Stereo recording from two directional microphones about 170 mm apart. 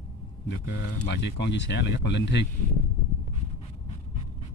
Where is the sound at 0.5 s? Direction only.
90° left.